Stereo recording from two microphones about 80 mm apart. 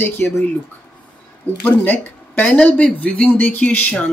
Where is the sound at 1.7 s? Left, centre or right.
Left.